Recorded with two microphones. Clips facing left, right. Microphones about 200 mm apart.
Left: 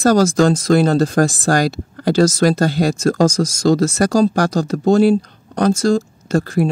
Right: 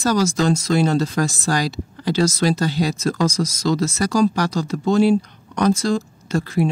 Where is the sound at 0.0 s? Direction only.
50° left (ahead or behind).